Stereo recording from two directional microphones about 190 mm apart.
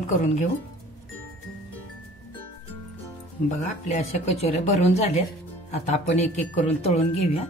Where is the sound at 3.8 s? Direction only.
35° left (ahead or behind).